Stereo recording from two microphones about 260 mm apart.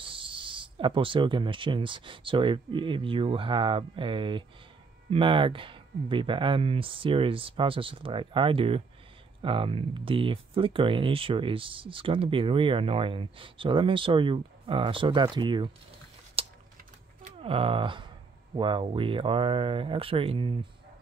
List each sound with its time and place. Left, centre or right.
0.0 s speech: centre
16.4 s a sound: right
17.4 s speech: right